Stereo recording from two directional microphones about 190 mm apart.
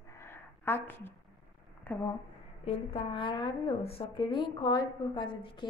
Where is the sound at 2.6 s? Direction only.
30° left (ahead or behind).